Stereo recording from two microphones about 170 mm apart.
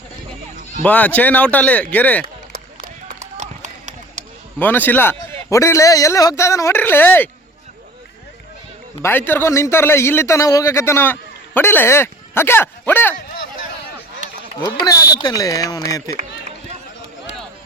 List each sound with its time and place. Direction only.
0.9 s a man's voice: 10° left (ahead or behind)
2.2 s a sound: 60° right (ahead or behind)
3.3 s a sound: 45° right (ahead or behind)
4.6 s a man's voice: 10° left (ahead or behind)
9.0 s a man's voice: 15° left (ahead or behind)
14.8 s speech: 25° left (ahead or behind)